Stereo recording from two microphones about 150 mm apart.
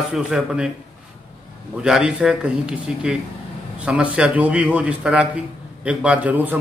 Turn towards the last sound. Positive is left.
turn(degrees=-10)  # may be behind; listen again after turning